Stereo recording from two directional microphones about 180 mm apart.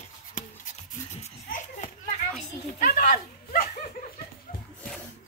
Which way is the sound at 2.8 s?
50° left (ahead or behind).